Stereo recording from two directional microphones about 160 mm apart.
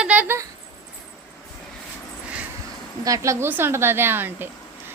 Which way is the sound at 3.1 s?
20° right (ahead or behind).